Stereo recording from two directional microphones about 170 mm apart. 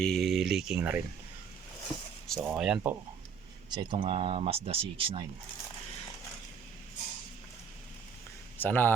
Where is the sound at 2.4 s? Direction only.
5° right (ahead or behind).